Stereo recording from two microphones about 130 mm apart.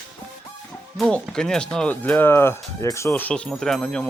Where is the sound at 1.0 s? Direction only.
5° left (ahead or behind).